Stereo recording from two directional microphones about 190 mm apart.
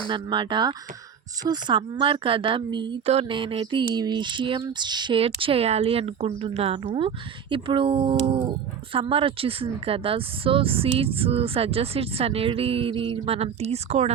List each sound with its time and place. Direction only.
0.1 s speech: 25° right (ahead or behind)